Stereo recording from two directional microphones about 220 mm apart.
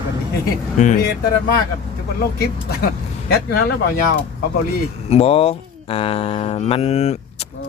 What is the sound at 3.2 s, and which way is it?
Speech, 45° left (ahead or behind).